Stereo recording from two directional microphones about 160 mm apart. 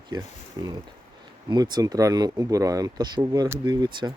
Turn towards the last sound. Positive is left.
turn(degrees=-25)  # may be behind; listen again after turning